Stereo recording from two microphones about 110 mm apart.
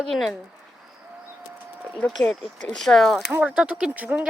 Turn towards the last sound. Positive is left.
turn(degrees=-15)  # may be behind; listen again after turning